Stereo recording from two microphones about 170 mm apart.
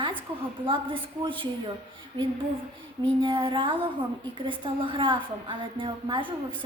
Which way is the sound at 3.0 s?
30° right (ahead or behind).